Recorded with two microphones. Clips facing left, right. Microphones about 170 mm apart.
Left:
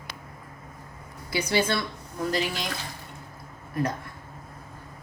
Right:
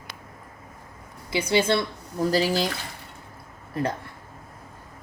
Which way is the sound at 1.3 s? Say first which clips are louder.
Right 3 dB; 25° right (ahead or behind).